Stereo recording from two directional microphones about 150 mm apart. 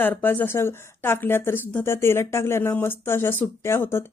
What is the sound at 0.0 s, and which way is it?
Speech, 15° left (ahead or behind).